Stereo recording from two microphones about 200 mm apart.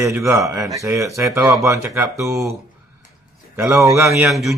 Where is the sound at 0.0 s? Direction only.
15° right (ahead or behind).